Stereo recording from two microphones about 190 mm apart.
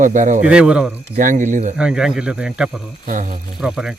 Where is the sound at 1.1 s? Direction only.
45° right (ahead or behind).